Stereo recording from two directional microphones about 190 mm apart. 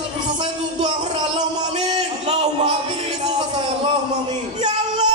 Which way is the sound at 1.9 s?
30° right (ahead or behind).